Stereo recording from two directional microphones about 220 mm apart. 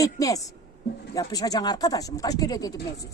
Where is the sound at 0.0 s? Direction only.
15° left (ahead or behind).